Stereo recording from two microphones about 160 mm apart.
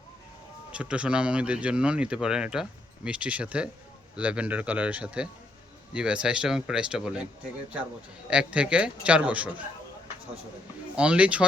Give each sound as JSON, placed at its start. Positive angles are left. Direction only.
{"t": 0.7, "sound": "speech", "side_deg": -5}
{"t": 8.3, "sound": "speech", "side_deg": -5}
{"t": 10.9, "sound": "speech", "side_deg": -5}